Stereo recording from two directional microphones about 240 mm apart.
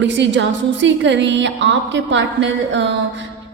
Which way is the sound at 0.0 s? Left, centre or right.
Right.